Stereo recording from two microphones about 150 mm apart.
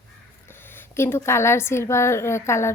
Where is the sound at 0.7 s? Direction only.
15° left (ahead or behind).